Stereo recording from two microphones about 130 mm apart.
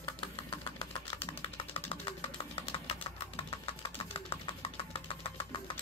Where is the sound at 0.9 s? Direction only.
45° left (ahead or behind).